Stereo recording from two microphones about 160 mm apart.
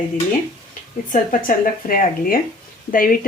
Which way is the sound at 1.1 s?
60° left (ahead or behind).